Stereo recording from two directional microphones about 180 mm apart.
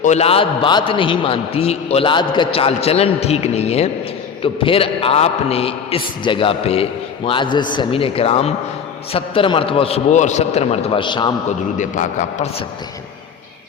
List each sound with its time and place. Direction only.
0.0 s a man's voice: 40° left (ahead or behind)
11.4 s a man's voice: 40° left (ahead or behind)